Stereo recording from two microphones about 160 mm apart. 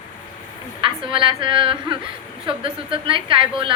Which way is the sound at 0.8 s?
35° right (ahead or behind).